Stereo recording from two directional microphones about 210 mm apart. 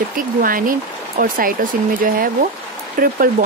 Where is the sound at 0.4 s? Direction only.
40° right (ahead or behind).